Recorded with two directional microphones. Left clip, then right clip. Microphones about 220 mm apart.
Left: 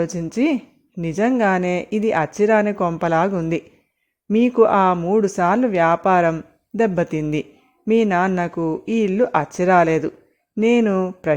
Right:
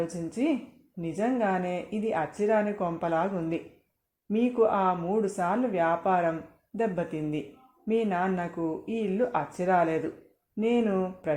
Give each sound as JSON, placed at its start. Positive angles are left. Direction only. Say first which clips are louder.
{"t": 0.3, "sound": "speech", "louder": "left 8 dB", "side_deg": 45}